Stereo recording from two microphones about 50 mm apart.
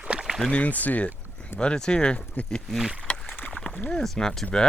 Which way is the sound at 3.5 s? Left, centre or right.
Left.